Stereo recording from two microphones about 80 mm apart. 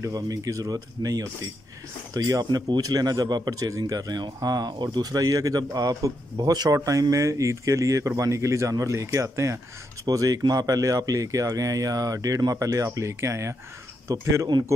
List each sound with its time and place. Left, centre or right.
0.1 s speech: right